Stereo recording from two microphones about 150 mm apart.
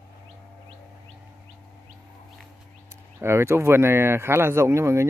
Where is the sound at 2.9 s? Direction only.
15° right (ahead or behind).